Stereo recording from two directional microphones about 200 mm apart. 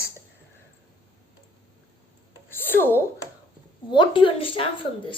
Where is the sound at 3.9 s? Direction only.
25° left (ahead or behind).